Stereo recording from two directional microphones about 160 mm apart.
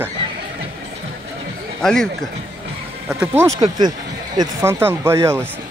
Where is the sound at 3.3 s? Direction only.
20° right (ahead or behind).